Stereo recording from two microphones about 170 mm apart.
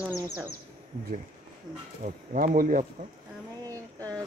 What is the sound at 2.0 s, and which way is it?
Speech, 50° right (ahead or behind).